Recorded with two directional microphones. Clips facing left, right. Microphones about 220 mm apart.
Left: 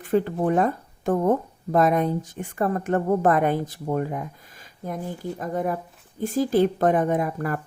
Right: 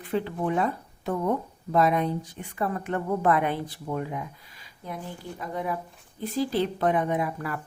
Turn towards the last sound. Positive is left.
turn(degrees=45)  # may be behind; listen again after turning